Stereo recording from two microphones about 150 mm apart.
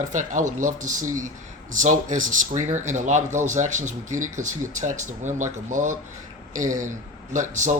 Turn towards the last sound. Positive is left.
turn(degrees=-55)  # may be behind; listen again after turning